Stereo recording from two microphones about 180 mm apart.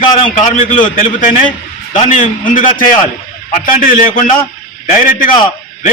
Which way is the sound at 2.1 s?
45° left (ahead or behind).